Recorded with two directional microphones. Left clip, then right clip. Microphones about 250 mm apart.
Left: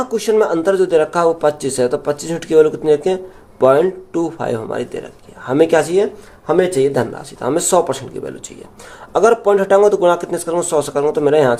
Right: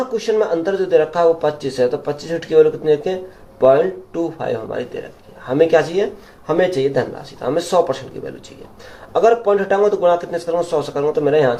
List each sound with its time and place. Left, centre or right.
0.1 s speech: left
9.1 s speech: left